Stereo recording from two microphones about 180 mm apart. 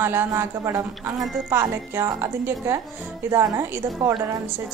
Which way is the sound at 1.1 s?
Centre (ahead or behind).